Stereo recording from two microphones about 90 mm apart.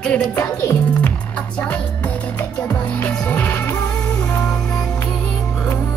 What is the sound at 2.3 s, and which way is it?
Music, 25° left (ahead or behind).